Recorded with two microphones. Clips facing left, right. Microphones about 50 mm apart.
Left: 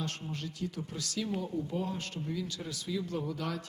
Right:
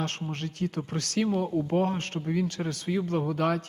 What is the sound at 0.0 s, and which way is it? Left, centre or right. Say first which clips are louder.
Speech: right 6 dB; right.